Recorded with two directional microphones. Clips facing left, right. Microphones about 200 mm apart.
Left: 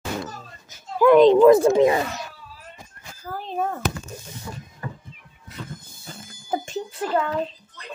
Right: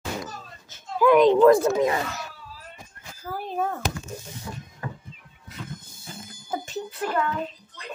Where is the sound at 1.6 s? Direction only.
25° left (ahead or behind).